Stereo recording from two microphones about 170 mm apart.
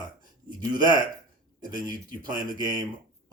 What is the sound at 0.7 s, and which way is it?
Speech, 25° right (ahead or behind).